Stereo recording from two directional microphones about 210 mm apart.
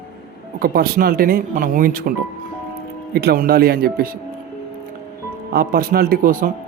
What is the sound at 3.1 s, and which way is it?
Speech, 45° right (ahead or behind).